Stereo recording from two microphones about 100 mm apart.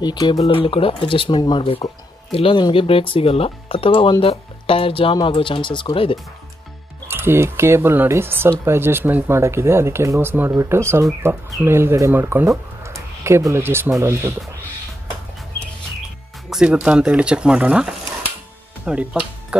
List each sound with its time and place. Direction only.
0.0 s speech: 45° left (ahead or behind)
0.4 s speech: 65° left (ahead or behind)
7.1 s speech: 20° right (ahead or behind)
16.4 s speech: 5° right (ahead or behind)